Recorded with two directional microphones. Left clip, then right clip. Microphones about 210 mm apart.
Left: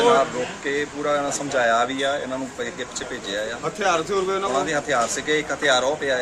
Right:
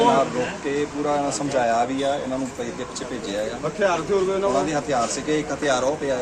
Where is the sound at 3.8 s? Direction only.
60° left (ahead or behind).